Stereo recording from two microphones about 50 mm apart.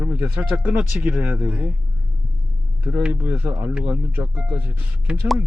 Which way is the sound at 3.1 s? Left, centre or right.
Right.